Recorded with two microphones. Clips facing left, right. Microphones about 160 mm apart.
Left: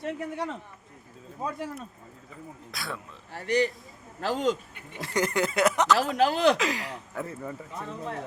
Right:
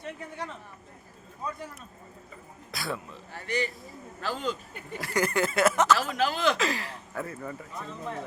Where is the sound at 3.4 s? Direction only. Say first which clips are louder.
Left 6 dB; 65° left (ahead or behind).